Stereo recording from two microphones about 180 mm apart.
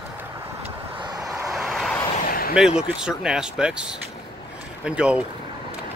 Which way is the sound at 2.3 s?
55° left (ahead or behind).